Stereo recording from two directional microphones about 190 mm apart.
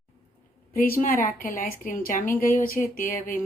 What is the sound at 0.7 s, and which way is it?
Speech, 45° left (ahead or behind).